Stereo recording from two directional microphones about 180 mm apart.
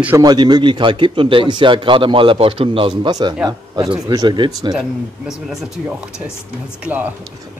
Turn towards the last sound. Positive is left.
turn(degrees=-10)  # may be behind; listen again after turning